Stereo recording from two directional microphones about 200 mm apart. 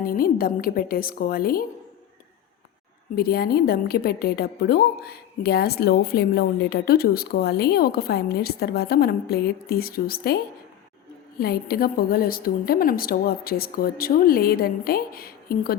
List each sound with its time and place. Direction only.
0.0 s a woman's voice: 45° left (ahead or behind)
3.2 s a woman's voice: 50° left (ahead or behind)